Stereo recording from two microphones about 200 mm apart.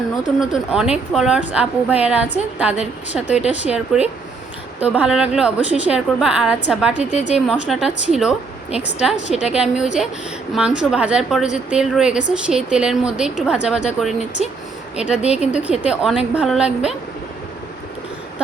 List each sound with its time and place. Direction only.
0.3 s a woman's voice: centre (ahead or behind)
7.0 s a woman's voice: 35° left (ahead or behind)
7.3 s a woman's voice: centre (ahead or behind)
15.5 s a woman's voice: 5° right (ahead or behind)